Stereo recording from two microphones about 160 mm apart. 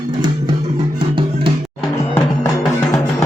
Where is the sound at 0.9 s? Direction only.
30° right (ahead or behind).